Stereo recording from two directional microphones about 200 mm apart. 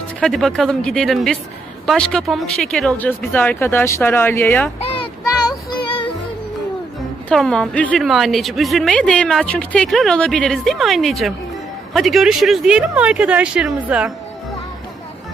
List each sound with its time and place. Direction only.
0.2 s a woman's voice: centre (ahead or behind)
5.5 s child singing: 25° left (ahead or behind)
7.3 s a woman's voice: 5° left (ahead or behind)